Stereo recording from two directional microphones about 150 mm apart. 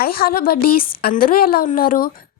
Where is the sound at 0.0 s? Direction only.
80° left.